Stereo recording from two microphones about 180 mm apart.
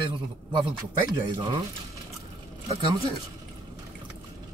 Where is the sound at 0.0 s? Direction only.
25° right (ahead or behind).